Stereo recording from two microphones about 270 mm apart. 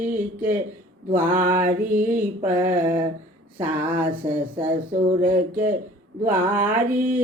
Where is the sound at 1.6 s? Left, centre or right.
Right.